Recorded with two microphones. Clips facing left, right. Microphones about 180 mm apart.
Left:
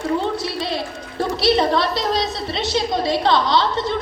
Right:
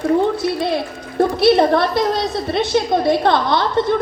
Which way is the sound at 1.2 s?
55° right (ahead or behind).